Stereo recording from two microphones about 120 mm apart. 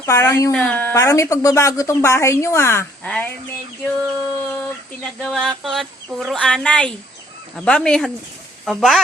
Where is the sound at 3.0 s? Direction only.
10° left (ahead or behind).